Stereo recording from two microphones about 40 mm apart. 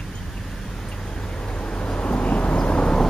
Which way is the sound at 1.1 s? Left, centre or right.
Left.